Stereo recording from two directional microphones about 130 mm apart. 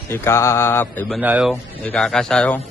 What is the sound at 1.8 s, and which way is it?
Speech, 5° left (ahead or behind).